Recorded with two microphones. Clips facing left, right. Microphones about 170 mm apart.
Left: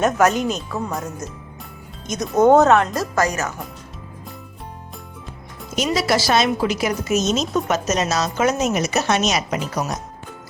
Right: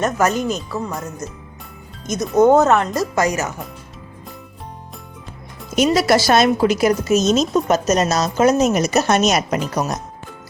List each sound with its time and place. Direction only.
0.0 s speech: centre (ahead or behind)
2.3 s speech: centre (ahead or behind)
3.2 s speech: 20° right (ahead or behind)
5.7 s a woman's voice: 55° right (ahead or behind)